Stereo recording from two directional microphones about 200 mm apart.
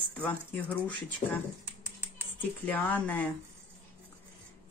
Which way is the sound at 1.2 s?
30° left (ahead or behind).